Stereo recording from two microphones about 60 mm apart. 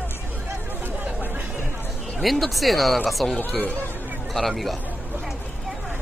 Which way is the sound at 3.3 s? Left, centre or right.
Left.